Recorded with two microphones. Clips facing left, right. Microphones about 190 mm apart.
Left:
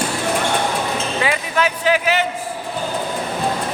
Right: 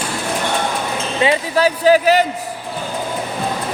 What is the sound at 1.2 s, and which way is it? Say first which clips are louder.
Speech: right 6 dB; 30° right (ahead or behind).